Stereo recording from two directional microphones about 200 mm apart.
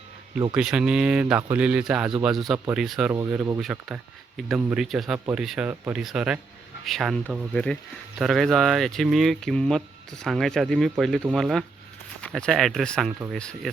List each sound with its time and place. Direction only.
0.5 s speech: 5° right (ahead or behind)
3.1 s speech: 15° right (ahead or behind); by 13.7 s 5° left (ahead or behind)